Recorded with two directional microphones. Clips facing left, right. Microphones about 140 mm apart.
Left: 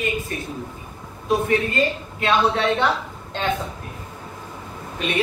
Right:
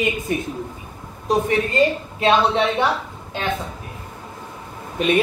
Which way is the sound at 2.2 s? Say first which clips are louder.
Right 2 dB; 20° right (ahead or behind).